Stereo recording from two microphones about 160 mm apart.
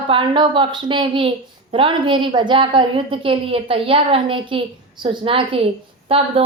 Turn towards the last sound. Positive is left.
turn(degrees=-35)  # may be behind; listen again after turning